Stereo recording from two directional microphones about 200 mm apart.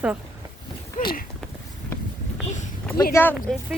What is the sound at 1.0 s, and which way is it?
Speech, 40° left (ahead or behind).